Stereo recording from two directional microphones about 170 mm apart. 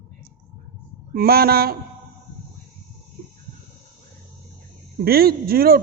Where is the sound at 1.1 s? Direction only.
65° right (ahead or behind).